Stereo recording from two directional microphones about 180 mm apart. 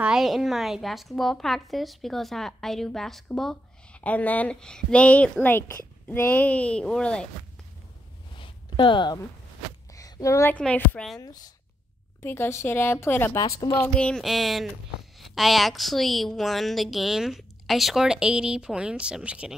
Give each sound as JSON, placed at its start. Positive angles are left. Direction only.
{"t": 0.0, "sound": "a woman's voice", "side_deg": 0}
{"t": 8.4, "sound": "a sound", "side_deg": 25}
{"t": 9.9, "sound": "a woman's voice", "side_deg": 20}
{"t": 11.1, "sound": "a woman's voice", "side_deg": 20}